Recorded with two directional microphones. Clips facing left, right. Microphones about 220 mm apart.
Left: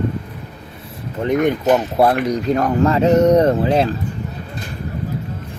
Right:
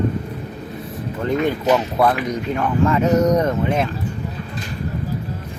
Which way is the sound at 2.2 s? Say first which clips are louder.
Left 4 dB; 35° left (ahead or behind).